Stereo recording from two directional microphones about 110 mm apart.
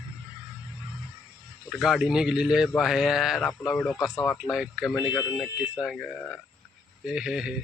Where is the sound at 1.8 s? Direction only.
5° right (ahead or behind).